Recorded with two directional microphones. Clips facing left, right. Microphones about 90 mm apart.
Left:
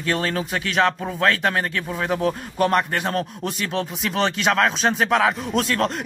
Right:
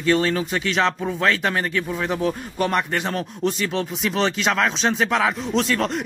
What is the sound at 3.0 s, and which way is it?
Speech, 40° left (ahead or behind).